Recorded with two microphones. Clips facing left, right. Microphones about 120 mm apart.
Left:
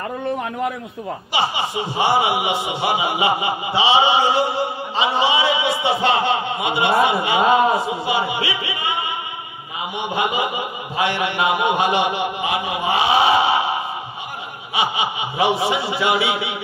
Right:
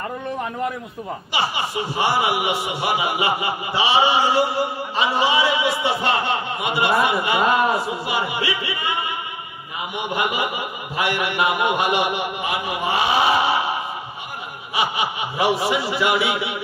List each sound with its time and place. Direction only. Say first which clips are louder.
1.3 s speech: left 2 dB; 20° left (ahead or behind)
9.9 s speech: left 2 dB; 25° left (ahead or behind)
14.8 s speech: left 1 dB; 25° left (ahead or behind)